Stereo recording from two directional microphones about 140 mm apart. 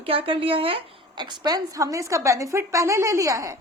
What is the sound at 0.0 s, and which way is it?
A woman's voice, 40° right (ahead or behind).